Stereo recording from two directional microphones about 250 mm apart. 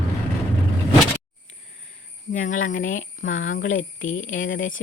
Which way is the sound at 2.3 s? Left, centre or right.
Left.